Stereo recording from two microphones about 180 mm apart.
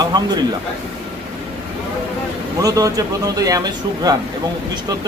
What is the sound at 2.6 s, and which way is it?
Speech, 20° right (ahead or behind).